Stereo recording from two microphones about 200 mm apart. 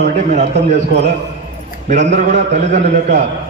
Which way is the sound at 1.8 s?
35° right (ahead or behind).